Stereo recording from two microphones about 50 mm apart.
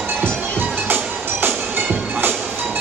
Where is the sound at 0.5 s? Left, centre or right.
Right.